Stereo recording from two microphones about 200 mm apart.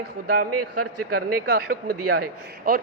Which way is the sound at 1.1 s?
50° right (ahead or behind).